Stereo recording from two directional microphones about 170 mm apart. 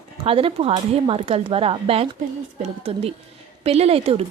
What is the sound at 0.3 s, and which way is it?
A woman's voice, 35° right (ahead or behind).